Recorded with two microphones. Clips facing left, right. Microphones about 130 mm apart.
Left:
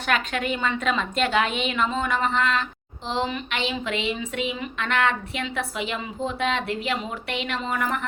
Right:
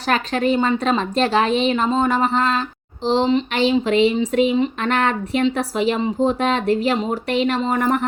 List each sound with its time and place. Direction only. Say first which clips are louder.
0.1 s speech: right 7 dB; 35° right (ahead or behind)